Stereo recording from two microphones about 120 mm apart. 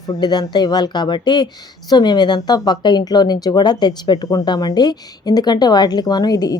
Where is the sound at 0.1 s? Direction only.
35° left (ahead or behind).